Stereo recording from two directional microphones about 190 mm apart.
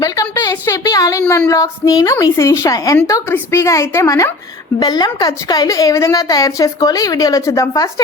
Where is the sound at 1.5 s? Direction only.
15° left (ahead or behind).